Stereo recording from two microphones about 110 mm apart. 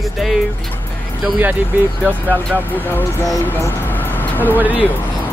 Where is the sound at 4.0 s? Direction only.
15° left (ahead or behind).